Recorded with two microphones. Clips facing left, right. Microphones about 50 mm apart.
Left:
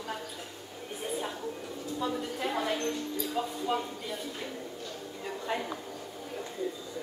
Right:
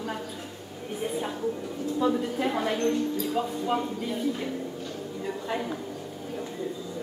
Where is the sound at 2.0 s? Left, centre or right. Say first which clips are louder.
Right 7 dB; centre.